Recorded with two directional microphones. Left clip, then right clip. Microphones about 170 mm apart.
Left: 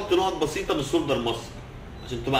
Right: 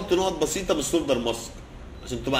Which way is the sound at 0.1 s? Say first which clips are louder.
Even; 50° right (ahead or behind).